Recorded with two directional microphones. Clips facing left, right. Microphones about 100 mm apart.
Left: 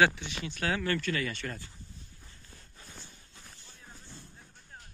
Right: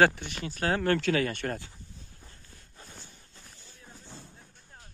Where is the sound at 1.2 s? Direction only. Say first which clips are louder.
Right 5 dB; 55° right (ahead or behind).